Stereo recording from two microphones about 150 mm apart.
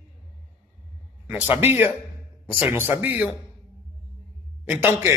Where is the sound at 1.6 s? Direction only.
15° right (ahead or behind).